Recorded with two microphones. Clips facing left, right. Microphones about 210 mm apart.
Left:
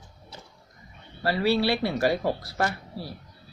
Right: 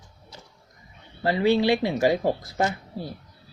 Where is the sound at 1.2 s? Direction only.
20° right (ahead or behind).